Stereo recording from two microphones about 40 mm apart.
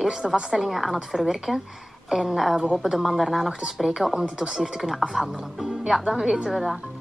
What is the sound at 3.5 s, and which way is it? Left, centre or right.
A woman's voice, centre.